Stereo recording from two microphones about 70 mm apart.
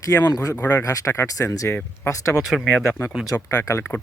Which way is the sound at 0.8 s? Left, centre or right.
Left.